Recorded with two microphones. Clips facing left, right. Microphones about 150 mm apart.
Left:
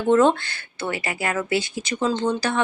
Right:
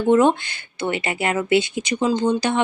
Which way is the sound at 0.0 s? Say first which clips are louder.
Right 1 dB; 15° right (ahead or behind).